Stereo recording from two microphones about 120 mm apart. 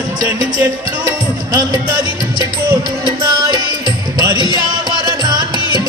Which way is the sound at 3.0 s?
35° right (ahead or behind).